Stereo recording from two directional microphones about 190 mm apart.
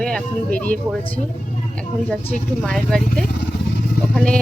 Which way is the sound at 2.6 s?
5° left (ahead or behind).